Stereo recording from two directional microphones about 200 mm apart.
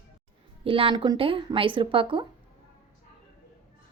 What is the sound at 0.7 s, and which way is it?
Speech, 25° right (ahead or behind).